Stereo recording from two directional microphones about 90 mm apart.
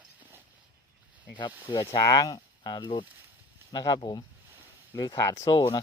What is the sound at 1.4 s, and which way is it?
Speech, 60° left (ahead or behind).